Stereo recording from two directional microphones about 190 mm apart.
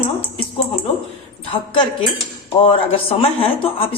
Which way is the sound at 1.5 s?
25° left (ahead or behind).